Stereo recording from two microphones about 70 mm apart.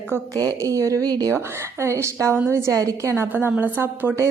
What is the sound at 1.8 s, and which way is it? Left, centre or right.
Speech, right.